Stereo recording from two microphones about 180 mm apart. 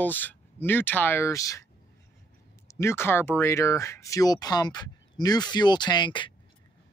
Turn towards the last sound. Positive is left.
turn(degrees=25)  # may be behind; listen again after turning